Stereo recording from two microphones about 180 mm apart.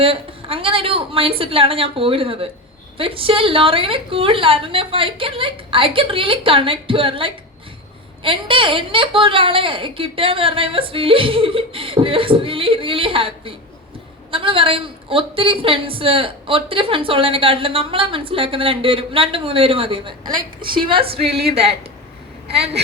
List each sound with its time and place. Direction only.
0.0 s a woman's voice: 30° right (ahead or behind)